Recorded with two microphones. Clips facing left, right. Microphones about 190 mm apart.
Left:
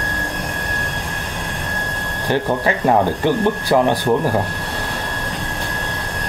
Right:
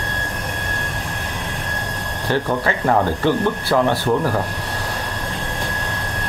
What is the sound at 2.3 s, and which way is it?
Speech, 15° left (ahead or behind).